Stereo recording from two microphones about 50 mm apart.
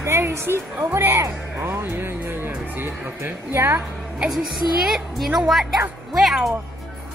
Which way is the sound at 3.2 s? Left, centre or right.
Right.